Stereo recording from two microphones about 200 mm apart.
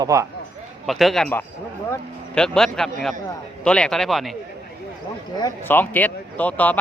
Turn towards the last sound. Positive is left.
turn(degrees=10)  # may be behind; listen again after turning